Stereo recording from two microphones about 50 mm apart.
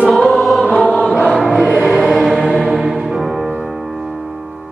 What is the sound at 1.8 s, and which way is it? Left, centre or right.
Music, centre.